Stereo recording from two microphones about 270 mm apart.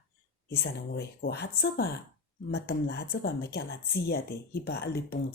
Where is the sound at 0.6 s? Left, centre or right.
Left.